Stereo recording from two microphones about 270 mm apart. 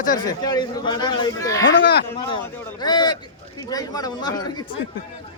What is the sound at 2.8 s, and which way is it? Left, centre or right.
Speech, centre.